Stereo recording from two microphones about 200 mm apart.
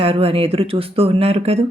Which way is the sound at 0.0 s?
30° right (ahead or behind).